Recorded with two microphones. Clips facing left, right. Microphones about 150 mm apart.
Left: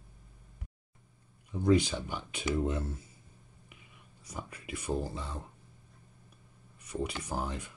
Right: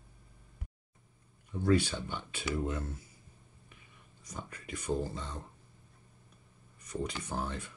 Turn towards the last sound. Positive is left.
turn(degrees=10)  # may be behind; listen again after turning